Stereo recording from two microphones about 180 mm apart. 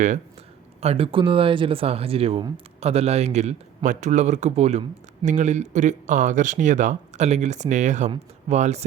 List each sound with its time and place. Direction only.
0.8 s speech: 35° right (ahead or behind)